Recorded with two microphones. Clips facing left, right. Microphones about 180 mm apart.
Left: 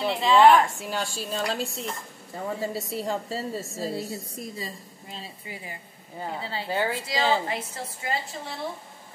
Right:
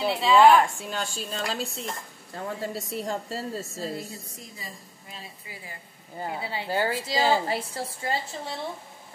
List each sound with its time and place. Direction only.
0.0 s a woman's voice: 5° right (ahead or behind)
3.9 s a woman's voice: 35° left (ahead or behind)
5.1 s speech: 20° left (ahead or behind)
6.2 s speech: 10° right (ahead or behind)
6.7 s a woman's voice: centre (ahead or behind)
7.4 s a woman's voice: 30° right (ahead or behind)